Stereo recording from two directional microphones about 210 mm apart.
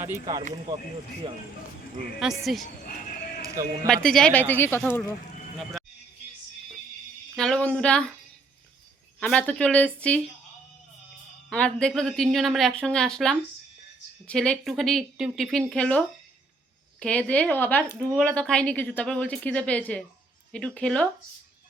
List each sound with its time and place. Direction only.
0.0 s speech: 15° right (ahead or behind)
2.1 s speech: centre (ahead or behind)
3.4 s sheep: 15° right (ahead or behind)
3.8 s speech: 5° left (ahead or behind)
7.3 s speech: 5° left (ahead or behind)
9.2 s speech: 5° left (ahead or behind)
11.4 s speech: 5° left (ahead or behind)